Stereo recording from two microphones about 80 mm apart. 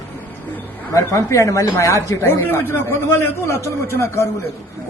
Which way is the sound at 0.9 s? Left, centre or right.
Left.